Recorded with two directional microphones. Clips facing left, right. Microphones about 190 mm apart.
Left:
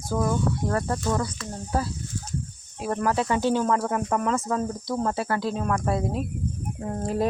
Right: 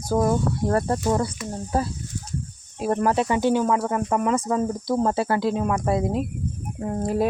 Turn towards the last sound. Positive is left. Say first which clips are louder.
# right 3 dB
turn(degrees=-10)  # may be behind; listen again after turning